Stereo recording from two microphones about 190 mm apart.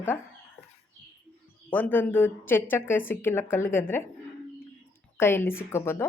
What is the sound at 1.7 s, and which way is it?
A woman's voice, 10° left (ahead or behind).